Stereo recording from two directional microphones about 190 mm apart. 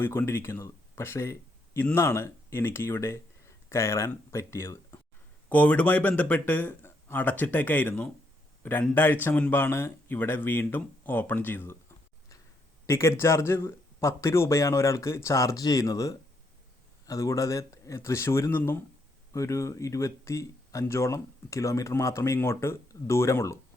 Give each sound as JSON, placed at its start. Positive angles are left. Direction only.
{"t": 0.0, "sound": "speech", "side_deg": 10}
{"t": 12.8, "sound": "speech", "side_deg": 15}